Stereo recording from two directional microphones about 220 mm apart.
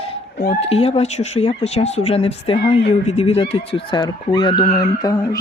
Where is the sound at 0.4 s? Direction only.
30° left (ahead or behind).